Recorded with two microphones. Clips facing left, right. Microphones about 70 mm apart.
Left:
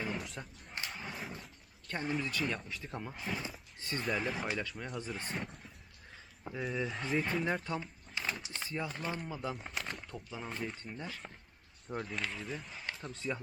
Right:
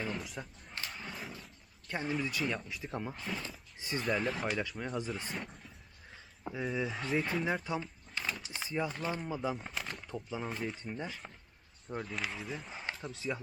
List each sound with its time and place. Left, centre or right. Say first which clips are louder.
0.0 s a sound: even; centre
1.9 s speech: right 1 dB; centre
2.6 s speech: right 3 dB; centre
3.2 s speech: left 1 dB; centre
3.8 s speech: right 2 dB; centre
4.0 s speech: right 2 dB; centre
7.8 s a sound: right 1 dB; centre
8.5 s speech: right 3 dB; centre
9.0 s speech: right 3 dB; centre
9.6 s a sound: even; centre
10.2 s speech: right 3 dB; centre
12.7 s a sound: right 2 dB; centre
13.0 s speech: even; centre